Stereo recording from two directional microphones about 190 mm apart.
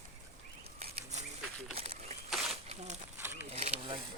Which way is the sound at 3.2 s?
10° right (ahead or behind).